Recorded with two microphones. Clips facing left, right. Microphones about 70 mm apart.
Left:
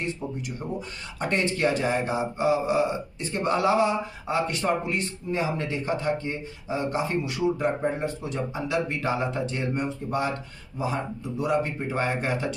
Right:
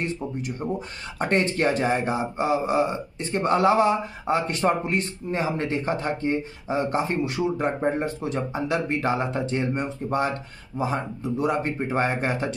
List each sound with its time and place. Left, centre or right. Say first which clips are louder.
0.4 s speech: right 4 dB; right